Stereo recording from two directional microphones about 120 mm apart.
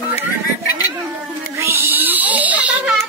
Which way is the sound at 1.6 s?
20° right (ahead or behind).